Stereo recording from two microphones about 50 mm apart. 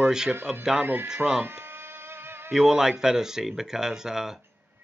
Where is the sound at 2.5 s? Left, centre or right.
Centre.